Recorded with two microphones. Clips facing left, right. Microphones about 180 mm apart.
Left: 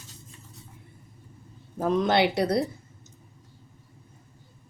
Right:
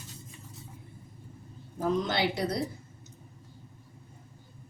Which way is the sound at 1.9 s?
65° left (ahead or behind).